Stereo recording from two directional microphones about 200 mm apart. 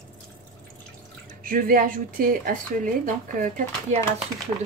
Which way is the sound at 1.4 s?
45° right (ahead or behind).